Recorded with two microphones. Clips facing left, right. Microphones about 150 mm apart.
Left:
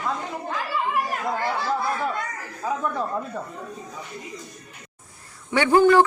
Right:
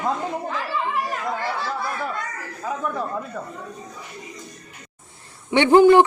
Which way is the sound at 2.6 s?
5° left (ahead or behind).